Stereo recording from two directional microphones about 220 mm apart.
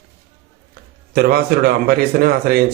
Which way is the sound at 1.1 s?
45° right (ahead or behind).